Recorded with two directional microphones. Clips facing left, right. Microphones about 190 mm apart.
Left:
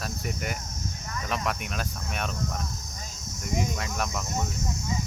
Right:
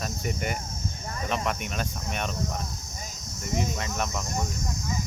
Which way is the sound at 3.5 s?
Centre (ahead or behind).